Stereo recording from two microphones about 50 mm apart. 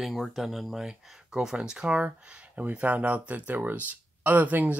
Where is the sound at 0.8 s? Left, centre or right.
Centre.